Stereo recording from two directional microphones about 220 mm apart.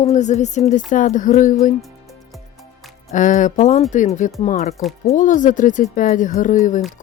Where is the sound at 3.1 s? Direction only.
35° left (ahead or behind).